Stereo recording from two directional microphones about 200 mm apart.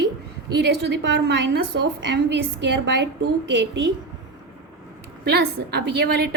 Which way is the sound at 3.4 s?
65° right (ahead or behind).